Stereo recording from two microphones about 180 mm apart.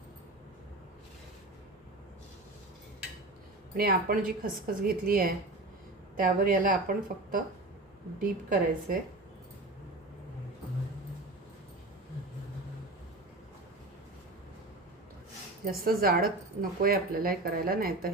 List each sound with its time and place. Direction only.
3.8 s a woman's voice: 55° right (ahead or behind)
15.6 s speech: 55° right (ahead or behind)